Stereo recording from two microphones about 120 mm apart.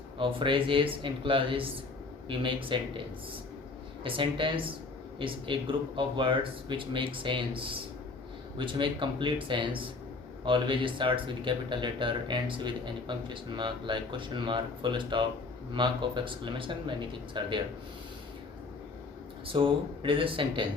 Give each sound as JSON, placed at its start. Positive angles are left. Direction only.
{"t": 0.2, "sound": "speech", "side_deg": -45}
{"t": 4.0, "sound": "speech", "side_deg": -45}
{"t": 19.5, "sound": "speech", "side_deg": -45}